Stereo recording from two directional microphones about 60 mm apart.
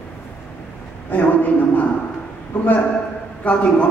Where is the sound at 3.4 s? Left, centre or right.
Centre.